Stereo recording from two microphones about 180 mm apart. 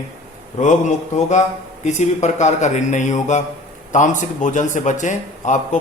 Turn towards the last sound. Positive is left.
turn(degrees=45)  # may be behind; listen again after turning